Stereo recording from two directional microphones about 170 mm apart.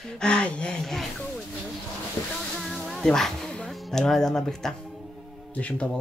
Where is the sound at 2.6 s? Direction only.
Centre (ahead or behind).